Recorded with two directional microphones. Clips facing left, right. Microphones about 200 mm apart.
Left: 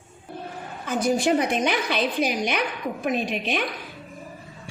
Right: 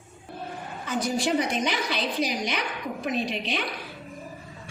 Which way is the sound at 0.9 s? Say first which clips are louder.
Left 4 dB; 50° left (ahead or behind).